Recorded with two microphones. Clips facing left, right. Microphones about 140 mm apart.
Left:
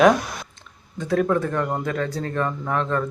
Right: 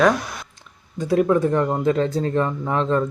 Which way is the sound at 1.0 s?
10° right (ahead or behind).